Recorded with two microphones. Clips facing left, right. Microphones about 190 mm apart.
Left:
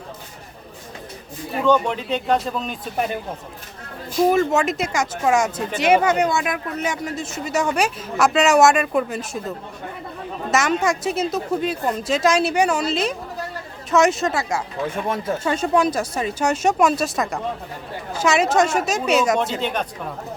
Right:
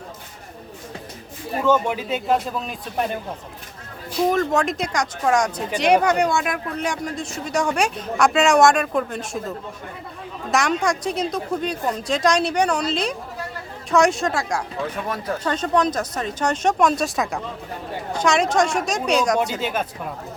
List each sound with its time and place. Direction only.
1.6 s speech: 5° right (ahead or behind)
4.3 s speech: 5° left (ahead or behind)
14.8 s speech: 25° left (ahead or behind)
15.4 s speech: 10° left (ahead or behind)